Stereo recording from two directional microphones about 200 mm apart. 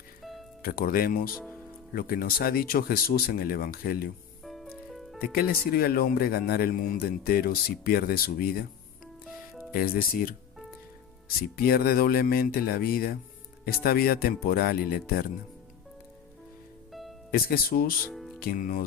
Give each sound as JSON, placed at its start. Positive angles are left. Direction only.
{"t": 0.6, "sound": "speech", "side_deg": 50}
{"t": 4.4, "sound": "music", "side_deg": 0}
{"t": 5.2, "sound": "speech", "side_deg": 50}
{"t": 9.7, "sound": "speech", "side_deg": 50}
{"t": 16.9, "sound": "music", "side_deg": 0}
{"t": 17.3, "sound": "speech", "side_deg": 50}
{"t": 18.1, "sound": "music", "side_deg": 0}
{"t": 18.3, "sound": "speech", "side_deg": 45}